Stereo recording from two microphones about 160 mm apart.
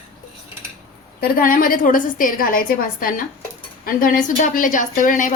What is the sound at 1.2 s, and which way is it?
A woman's voice, 60° left (ahead or behind).